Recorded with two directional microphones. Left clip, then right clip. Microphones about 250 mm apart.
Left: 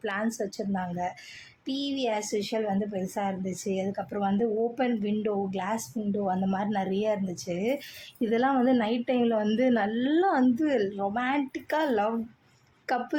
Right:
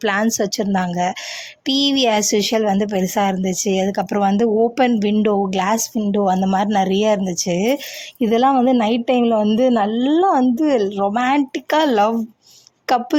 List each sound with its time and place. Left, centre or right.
0.0 s a woman's voice: right